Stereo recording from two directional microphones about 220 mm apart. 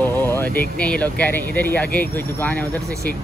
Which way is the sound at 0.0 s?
10° left (ahead or behind).